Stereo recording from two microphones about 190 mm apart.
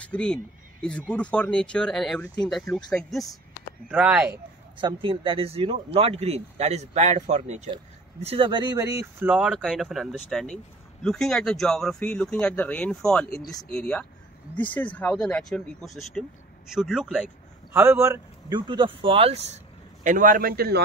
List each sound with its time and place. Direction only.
0.0 s speech: 5° left (ahead or behind)
5.0 s speech: 30° right (ahead or behind); by 17.3 s 5° right (ahead or behind)
17.7 s speech: 15° right (ahead or behind); by 20.8 s 55° right (ahead or behind)